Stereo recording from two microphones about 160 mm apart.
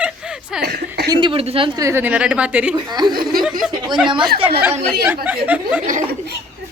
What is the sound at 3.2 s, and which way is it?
Speech, 65° right (ahead or behind).